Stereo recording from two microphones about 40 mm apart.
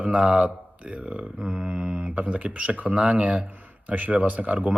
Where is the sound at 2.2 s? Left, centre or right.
Right.